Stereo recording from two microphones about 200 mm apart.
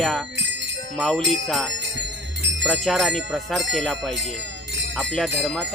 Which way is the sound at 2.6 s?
Centre (ahead or behind).